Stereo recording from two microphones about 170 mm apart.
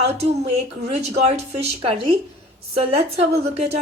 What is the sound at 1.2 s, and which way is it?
Speech, 40° right (ahead or behind).